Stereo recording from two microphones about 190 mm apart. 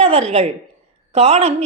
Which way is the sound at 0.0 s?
35° right (ahead or behind).